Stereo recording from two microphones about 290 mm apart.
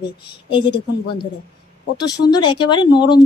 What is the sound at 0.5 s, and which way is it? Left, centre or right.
Speech, centre.